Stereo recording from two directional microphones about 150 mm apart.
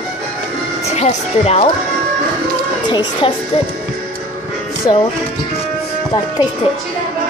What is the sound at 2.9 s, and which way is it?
Speech, 30° left (ahead or behind).